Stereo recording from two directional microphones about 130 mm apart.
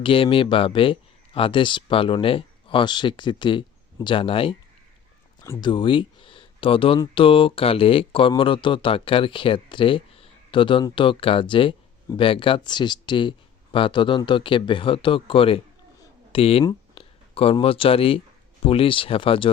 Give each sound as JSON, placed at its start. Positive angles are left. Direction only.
{"t": 0.0, "sound": "speech", "side_deg": 45}
{"t": 5.4, "sound": "a sound", "side_deg": 25}
{"t": 5.6, "sound": "speech", "side_deg": 40}